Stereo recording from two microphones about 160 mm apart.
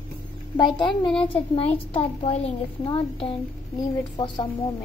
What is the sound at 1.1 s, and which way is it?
A woman's voice, 35° left (ahead or behind).